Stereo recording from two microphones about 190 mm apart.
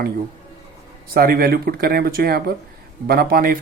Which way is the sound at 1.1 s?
50° right (ahead or behind).